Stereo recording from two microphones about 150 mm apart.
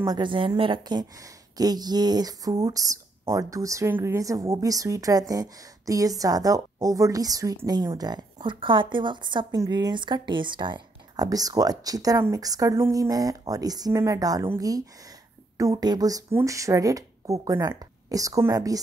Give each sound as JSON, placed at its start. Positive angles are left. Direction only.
{"t": 0.0, "sound": "a woman's voice", "side_deg": -30}